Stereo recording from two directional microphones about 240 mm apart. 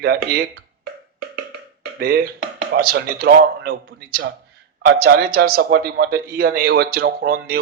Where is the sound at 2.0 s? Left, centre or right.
Right.